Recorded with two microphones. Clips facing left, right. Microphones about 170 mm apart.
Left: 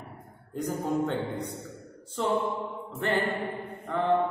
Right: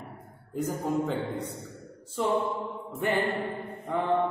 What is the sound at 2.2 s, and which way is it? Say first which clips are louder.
Music: right 1 dB; 5° right (ahead or behind).